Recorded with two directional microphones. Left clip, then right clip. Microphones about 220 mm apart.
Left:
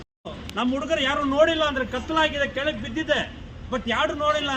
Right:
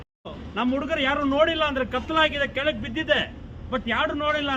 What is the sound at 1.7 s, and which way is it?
A man's voice, 25° left (ahead or behind).